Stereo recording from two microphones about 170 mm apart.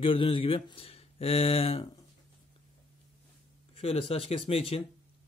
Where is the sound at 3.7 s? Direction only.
35° left (ahead or behind).